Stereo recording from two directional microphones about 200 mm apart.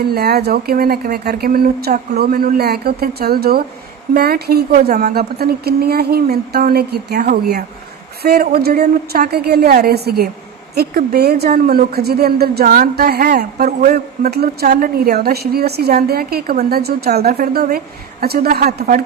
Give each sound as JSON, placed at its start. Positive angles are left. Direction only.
{"t": 0.1, "sound": "a woman's voice", "side_deg": -50}